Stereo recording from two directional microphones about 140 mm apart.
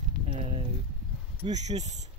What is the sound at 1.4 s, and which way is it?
Speech, 55° right (ahead or behind).